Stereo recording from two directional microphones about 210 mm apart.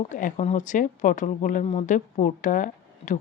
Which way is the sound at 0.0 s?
35° left (ahead or behind).